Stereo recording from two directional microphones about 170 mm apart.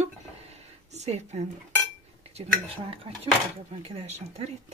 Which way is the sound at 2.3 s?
35° right (ahead or behind).